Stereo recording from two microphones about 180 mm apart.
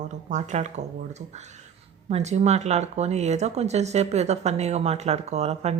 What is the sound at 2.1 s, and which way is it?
Speech, 35° right (ahead or behind).